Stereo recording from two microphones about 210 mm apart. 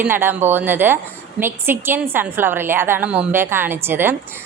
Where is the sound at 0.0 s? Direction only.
10° right (ahead or behind).